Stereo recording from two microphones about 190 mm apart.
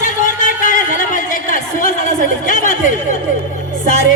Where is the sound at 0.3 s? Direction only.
45° left (ahead or behind).